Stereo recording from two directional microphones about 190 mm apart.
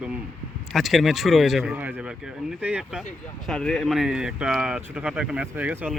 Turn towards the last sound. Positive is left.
turn(degrees=-10)  # may be behind; listen again after turning